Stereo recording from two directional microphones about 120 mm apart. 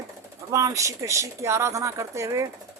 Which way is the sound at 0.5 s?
25° right (ahead or behind).